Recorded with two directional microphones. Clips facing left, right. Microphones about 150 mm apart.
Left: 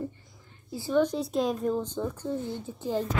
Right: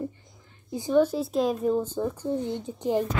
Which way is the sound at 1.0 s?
5° right (ahead or behind).